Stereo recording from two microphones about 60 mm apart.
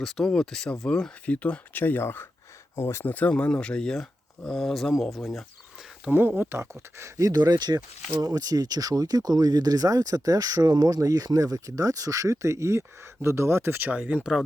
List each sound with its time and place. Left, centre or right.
0.0 s speech: centre
1.4 s speech: left
3.1 s speech: left; by 5.5 s centre
6.1 s speech: right
7.2 s speech: right